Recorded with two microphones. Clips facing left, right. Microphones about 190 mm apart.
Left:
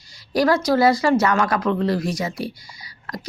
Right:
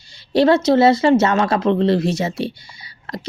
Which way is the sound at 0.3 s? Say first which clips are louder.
Right 4 dB; 25° right (ahead or behind).